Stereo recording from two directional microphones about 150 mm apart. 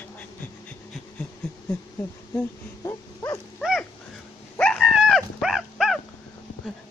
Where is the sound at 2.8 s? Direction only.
20° left (ahead or behind).